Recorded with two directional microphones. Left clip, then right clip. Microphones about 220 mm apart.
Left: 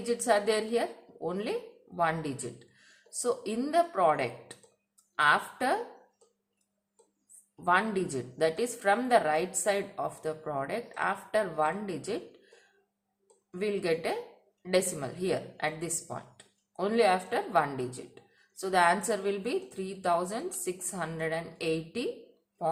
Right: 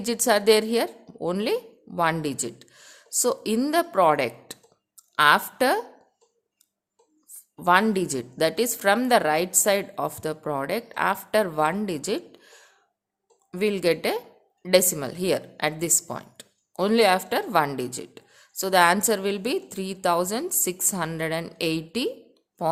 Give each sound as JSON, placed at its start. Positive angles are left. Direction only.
{"t": 0.0, "sound": "a woman's voice", "side_deg": -50}
{"t": 7.5, "sound": "a woman's voice", "side_deg": -50}